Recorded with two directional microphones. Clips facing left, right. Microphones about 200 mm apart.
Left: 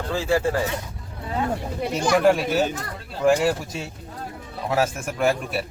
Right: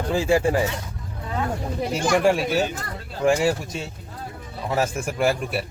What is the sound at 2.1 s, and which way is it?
Speech, centre (ahead or behind).